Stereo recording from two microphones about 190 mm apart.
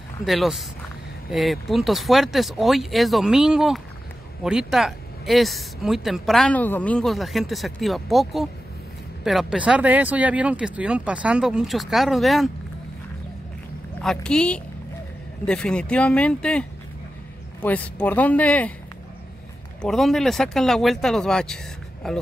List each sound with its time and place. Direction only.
0.2 s speech: centre (ahead or behind)
14.0 s speech: 5° left (ahead or behind)
19.8 s speech: centre (ahead or behind)